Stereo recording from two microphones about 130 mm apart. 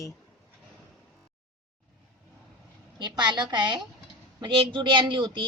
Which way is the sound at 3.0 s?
35° right (ahead or behind).